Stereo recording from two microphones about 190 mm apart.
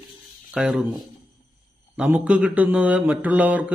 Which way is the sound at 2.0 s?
5° right (ahead or behind).